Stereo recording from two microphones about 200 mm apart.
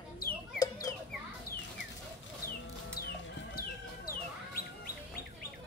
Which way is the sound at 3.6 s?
50° left (ahead or behind).